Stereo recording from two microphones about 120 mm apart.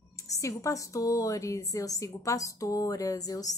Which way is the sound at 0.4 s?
25° left (ahead or behind).